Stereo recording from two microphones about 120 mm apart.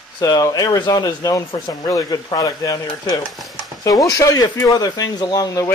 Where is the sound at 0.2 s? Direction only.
30° left (ahead or behind).